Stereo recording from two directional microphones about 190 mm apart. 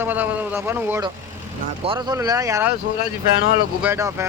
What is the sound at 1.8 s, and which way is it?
Speech, 25° right (ahead or behind).